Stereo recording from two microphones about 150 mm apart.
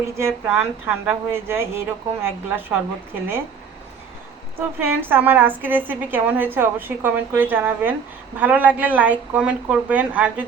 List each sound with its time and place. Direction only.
0.0 s a woman's voice: 15° right (ahead or behind)
4.5 s a woman's voice: 15° right (ahead or behind)